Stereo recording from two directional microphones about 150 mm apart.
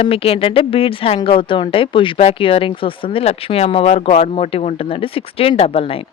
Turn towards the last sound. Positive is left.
turn(degrees=40)  # may be behind; listen again after turning